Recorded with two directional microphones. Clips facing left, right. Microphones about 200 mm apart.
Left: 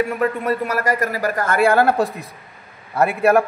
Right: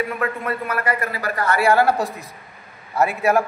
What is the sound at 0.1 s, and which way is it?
A man's voice, 40° left (ahead or behind).